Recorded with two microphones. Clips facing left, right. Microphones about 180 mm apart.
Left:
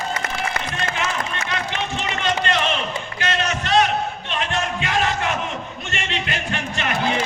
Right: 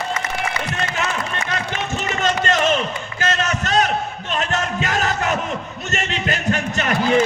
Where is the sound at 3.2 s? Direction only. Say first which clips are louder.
Right 3 dB; 45° right (ahead or behind).